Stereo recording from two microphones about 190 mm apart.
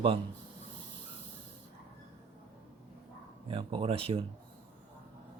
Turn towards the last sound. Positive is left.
turn(degrees=-30)  # may be behind; listen again after turning